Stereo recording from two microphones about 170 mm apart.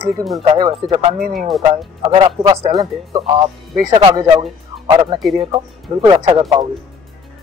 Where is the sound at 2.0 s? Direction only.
25° right (ahead or behind).